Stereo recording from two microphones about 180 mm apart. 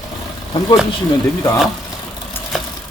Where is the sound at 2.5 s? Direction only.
Centre (ahead or behind).